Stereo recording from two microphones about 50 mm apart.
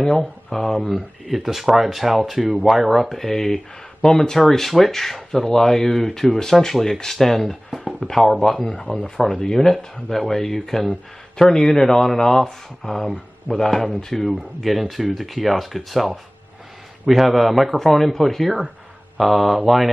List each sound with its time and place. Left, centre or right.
0.7 s speech: centre
1.2 s speech: centre
7.7 s a sound: centre
8.1 s speech: centre